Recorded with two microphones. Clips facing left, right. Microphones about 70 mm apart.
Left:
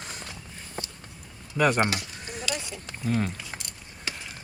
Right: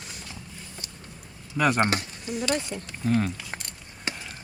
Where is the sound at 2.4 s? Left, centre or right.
Right.